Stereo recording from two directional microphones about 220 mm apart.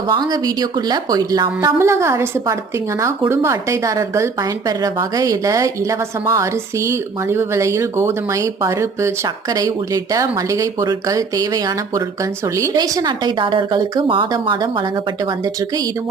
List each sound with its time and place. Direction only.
0.1 s a woman's voice: 20° right (ahead or behind)